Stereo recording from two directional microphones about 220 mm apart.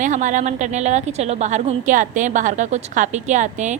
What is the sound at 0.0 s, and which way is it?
A woman's voice, 35° right (ahead or behind).